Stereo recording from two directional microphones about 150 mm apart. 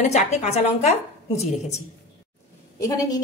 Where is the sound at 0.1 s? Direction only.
45° left (ahead or behind).